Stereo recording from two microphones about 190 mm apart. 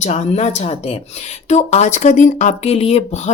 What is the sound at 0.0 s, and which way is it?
Speech, 35° left (ahead or behind).